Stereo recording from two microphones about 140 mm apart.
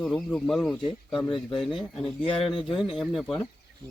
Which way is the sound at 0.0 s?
10° left (ahead or behind).